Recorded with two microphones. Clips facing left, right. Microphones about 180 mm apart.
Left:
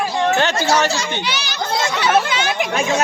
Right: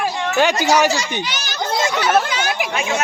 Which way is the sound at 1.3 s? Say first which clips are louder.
Left 3 dB; 45° right (ahead or behind).